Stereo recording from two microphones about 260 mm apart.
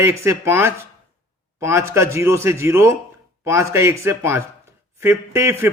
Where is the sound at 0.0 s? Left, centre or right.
Centre.